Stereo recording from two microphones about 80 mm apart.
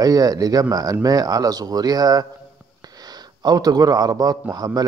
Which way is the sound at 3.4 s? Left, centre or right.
Right.